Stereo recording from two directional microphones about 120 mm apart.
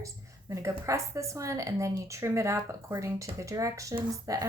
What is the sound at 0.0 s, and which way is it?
A woman's voice, 25° right (ahead or behind).